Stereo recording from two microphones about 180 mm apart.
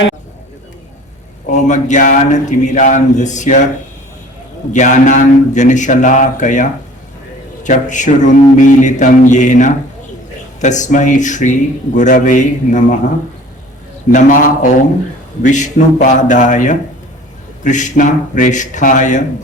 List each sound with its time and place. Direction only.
1.5 s speech: 40° left (ahead or behind)
4.7 s speech: 45° left (ahead or behind)
14.1 s speech: 50° left (ahead or behind)